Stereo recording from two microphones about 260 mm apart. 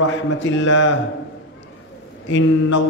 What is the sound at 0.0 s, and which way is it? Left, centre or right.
Mantra, left.